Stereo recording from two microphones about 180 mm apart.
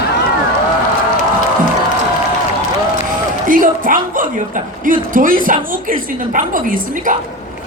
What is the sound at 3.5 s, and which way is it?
A woman's voice, 50° right (ahead or behind).